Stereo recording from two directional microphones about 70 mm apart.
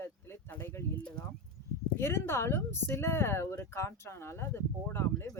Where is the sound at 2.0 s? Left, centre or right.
Left.